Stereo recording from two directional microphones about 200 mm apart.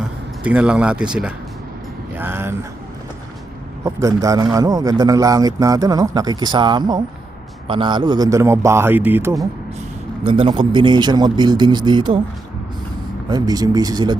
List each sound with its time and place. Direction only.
0.4 s speech: 5° right (ahead or behind)
3.8 s a man's voice: 15° right (ahead or behind)
10.2 s a man's voice: 25° right (ahead or behind)
13.3 s a man's voice: 20° right (ahead or behind)